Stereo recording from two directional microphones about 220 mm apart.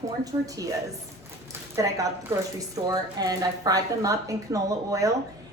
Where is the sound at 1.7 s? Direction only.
15° right (ahead or behind).